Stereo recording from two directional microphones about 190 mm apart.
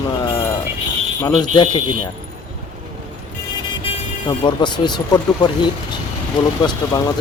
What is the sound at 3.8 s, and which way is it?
Speech, 25° left (ahead or behind).